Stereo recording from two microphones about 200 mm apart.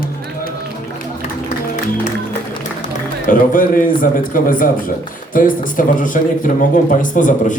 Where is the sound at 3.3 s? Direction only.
45° left (ahead or behind).